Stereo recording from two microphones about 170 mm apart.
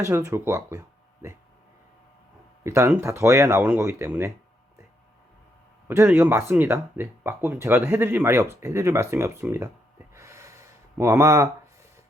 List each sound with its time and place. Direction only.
0.0 s speech: 15° right (ahead or behind)
2.6 s speech: 15° right (ahead or behind)
5.9 s speech: 15° right (ahead or behind)
10.2 s gasp: 15° right (ahead or behind)